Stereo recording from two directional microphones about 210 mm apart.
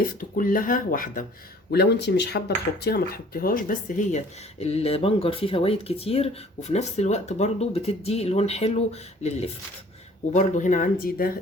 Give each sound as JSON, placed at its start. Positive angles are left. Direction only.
{"t": 0.0, "sound": "speech", "side_deg": 40}
{"t": 1.7, "sound": "speech", "side_deg": 50}